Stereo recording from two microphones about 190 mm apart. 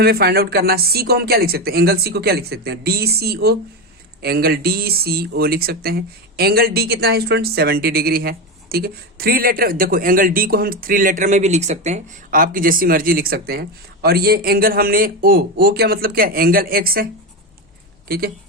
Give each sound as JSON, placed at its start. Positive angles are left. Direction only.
{"t": 0.0, "sound": "speech", "side_deg": -55}